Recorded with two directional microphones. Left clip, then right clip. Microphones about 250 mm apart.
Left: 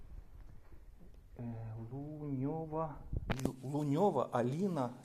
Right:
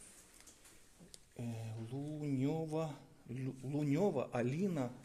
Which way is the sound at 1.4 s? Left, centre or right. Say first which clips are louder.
Even; right.